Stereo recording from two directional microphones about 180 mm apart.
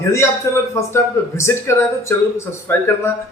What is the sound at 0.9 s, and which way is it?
Speech, 15° left (ahead or behind).